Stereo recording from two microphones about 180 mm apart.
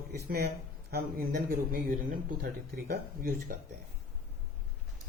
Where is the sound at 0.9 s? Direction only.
55° right (ahead or behind).